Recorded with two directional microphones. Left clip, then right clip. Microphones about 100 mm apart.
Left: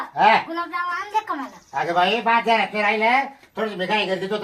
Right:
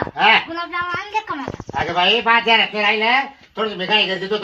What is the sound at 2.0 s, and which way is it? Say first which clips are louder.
Speech: right 4 dB; 15° left (ahead or behind).